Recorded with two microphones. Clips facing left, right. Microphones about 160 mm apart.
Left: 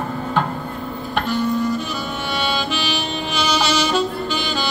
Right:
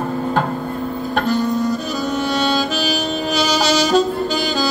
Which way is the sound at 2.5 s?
40° right (ahead or behind).